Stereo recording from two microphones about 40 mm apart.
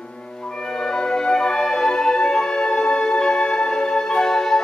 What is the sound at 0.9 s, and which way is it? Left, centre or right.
Music, centre.